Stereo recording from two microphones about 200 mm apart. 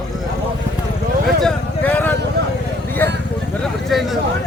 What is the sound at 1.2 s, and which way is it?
Vehicle, 5° left (ahead or behind).